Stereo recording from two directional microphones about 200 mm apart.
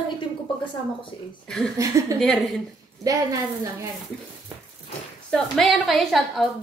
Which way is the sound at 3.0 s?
15° right (ahead or behind).